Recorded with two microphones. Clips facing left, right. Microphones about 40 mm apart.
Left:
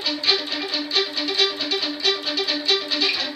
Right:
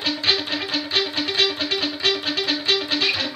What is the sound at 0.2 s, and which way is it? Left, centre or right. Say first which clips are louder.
Music: right 1 dB; right.